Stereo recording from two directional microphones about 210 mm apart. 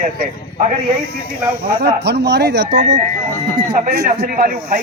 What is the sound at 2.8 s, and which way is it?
Speech, 35° right (ahead or behind).